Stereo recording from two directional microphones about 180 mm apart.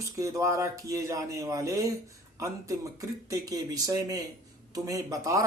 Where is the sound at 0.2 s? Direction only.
15° right (ahead or behind).